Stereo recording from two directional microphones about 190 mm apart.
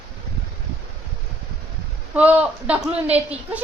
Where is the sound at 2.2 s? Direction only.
5° right (ahead or behind).